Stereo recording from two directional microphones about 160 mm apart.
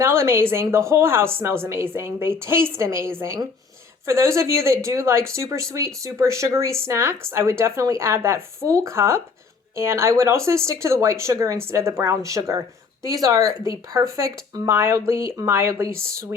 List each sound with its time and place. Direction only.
0.0 s speech: 15° right (ahead or behind)